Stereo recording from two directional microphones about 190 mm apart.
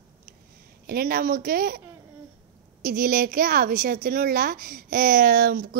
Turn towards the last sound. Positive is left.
turn(degrees=-50)  # may be behind; listen again after turning